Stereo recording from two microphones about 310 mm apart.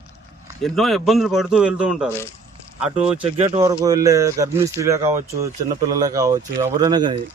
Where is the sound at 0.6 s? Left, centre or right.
Centre.